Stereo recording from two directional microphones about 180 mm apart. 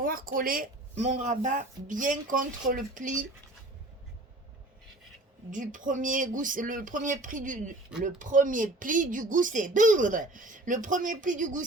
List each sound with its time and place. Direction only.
0.0 s speech: 50° right (ahead or behind)
5.5 s speech: 45° right (ahead or behind)